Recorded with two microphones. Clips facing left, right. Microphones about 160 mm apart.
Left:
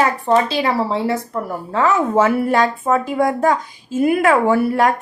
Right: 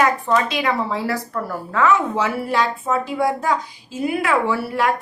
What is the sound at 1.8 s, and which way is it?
Speech, 35° left (ahead or behind).